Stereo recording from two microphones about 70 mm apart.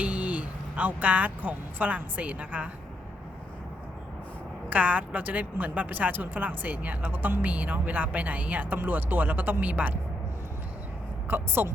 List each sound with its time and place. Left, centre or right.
0.0 s speech: right
4.7 s a woman's voice: right
11.3 s a woman's voice: right